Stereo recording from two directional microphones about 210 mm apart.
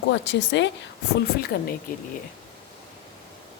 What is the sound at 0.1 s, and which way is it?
Speech, 60° left (ahead or behind).